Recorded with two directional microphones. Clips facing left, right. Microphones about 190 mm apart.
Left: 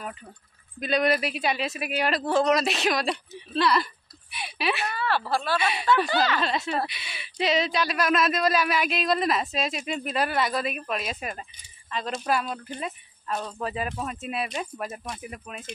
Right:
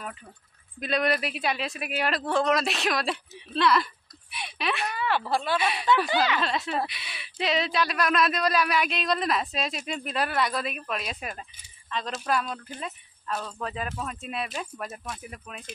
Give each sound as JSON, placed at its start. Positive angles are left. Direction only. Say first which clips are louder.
{"t": 0.7, "sound": "speech", "louder": "left 2 dB", "side_deg": 0}
{"t": 4.9, "sound": "speech", "louder": "even", "side_deg": -15}
{"t": 5.6, "sound": "speech", "louder": "left 1 dB", "side_deg": 0}